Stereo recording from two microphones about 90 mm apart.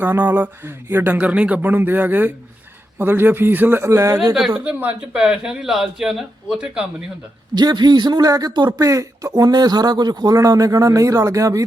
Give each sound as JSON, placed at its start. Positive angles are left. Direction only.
{"t": 0.0, "sound": "speech", "side_deg": -20}
{"t": 4.5, "sound": "speech", "side_deg": -15}
{"t": 7.5, "sound": "speech", "side_deg": -55}
{"t": 8.8, "sound": "speech", "side_deg": -35}